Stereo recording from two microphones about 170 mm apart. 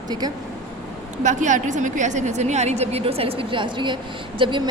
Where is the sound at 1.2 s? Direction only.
45° right (ahead or behind); by 4.6 s 25° right (ahead or behind).